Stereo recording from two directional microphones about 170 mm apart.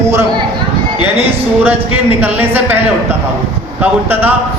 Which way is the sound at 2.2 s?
10° right (ahead or behind).